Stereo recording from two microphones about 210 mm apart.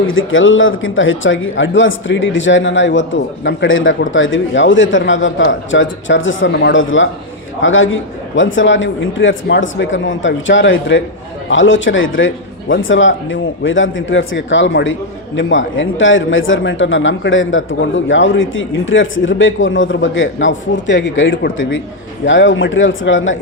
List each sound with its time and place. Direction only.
0.1 s speech: 70° left (ahead or behind)